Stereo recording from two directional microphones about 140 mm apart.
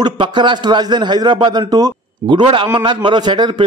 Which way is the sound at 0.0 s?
35° right (ahead or behind).